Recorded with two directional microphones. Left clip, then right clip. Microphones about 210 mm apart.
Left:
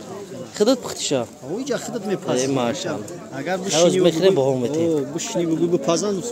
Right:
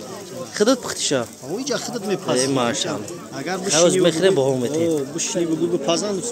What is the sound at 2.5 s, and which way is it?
Speech, 5° left (ahead or behind).